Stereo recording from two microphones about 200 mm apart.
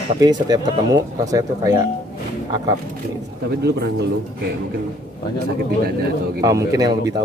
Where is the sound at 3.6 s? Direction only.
55° right (ahead or behind).